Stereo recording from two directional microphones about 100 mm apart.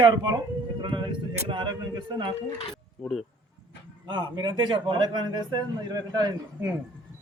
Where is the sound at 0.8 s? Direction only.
55° right (ahead or behind).